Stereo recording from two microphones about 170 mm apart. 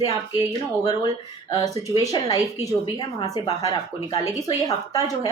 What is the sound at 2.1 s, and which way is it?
Speech, 20° left (ahead or behind).